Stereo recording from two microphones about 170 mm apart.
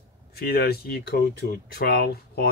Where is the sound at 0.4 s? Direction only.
65° left (ahead or behind).